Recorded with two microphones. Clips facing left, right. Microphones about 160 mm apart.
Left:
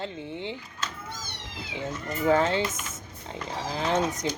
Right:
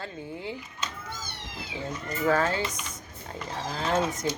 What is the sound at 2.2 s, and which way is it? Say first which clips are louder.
Speech: left 2 dB; 20° left (ahead or behind).